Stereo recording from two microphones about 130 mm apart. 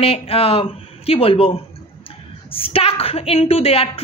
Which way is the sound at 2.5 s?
45° left (ahead or behind).